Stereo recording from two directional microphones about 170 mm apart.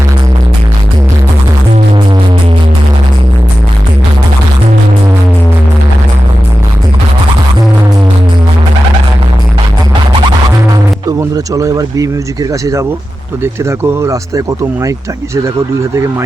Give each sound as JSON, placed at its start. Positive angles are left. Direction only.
{"t": 11.2, "sound": "speech", "side_deg": -20}